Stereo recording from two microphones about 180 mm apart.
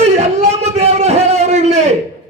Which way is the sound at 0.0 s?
35° right (ahead or behind).